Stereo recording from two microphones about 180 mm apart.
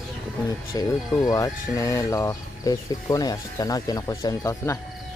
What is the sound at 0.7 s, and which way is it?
Speech, 20° left (ahead or behind).